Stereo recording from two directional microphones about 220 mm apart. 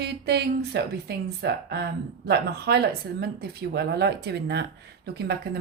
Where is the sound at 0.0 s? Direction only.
45° right (ahead or behind).